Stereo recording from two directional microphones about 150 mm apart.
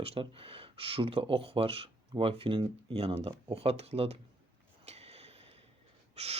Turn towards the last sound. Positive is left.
turn(degrees=-45)  # may be behind; listen again after turning